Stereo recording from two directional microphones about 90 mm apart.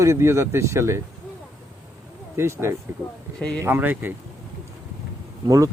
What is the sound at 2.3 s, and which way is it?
Speech, 30° right (ahead or behind).